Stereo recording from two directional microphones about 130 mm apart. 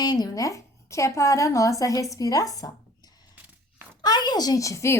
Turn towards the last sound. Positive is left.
turn(degrees=20)  # may be behind; listen again after turning